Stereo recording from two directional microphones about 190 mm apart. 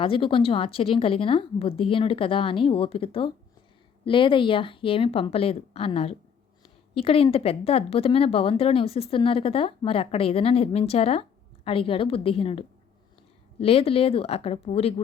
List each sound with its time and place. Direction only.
0.0 s speech: 30° left (ahead or behind)